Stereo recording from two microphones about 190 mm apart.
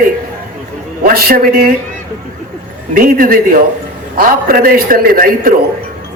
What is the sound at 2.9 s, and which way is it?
A man's voice, 45° right (ahead or behind).